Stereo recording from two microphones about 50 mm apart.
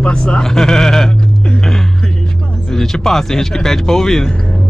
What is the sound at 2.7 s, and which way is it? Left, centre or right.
Speech, centre.